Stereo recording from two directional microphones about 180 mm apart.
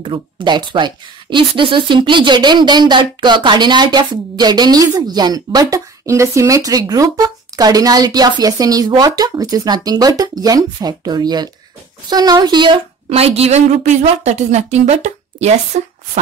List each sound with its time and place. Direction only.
0.0 s a woman's voice: 25° right (ahead or behind)